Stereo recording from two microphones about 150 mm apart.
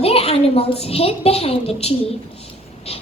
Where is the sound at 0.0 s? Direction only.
40° left (ahead or behind).